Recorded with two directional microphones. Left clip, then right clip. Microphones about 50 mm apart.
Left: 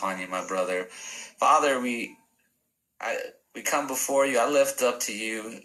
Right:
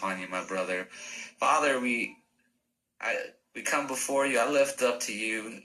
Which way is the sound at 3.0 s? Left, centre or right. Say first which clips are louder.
Left 1 dB; left.